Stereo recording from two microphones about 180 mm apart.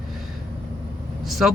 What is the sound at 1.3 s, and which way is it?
Speech, centre (ahead or behind).